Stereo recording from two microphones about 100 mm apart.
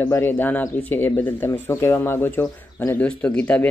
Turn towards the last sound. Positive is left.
turn(degrees=15)  # may be behind; listen again after turning